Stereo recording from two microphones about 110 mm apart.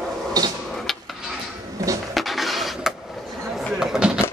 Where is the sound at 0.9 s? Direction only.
Centre (ahead or behind).